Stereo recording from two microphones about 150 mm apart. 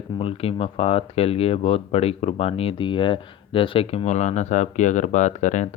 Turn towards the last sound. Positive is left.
turn(degrees=55)  # may be behind; listen again after turning